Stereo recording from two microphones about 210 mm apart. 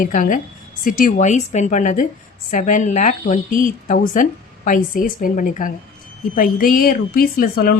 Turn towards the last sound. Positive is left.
turn(degrees=45)  # may be behind; listen again after turning